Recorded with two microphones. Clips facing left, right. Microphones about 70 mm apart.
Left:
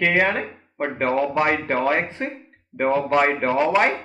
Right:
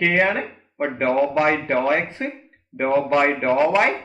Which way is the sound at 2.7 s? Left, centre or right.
Left.